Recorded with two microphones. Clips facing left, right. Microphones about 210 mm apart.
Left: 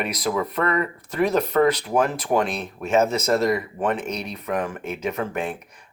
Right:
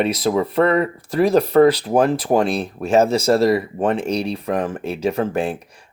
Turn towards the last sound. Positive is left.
turn(degrees=-30)  # may be behind; listen again after turning